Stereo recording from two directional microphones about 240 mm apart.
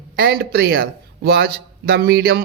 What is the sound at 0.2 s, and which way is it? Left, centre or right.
A man's voice, right.